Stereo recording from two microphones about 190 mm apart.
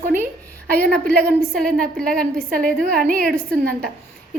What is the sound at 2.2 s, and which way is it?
A woman's voice, 50° right (ahead or behind).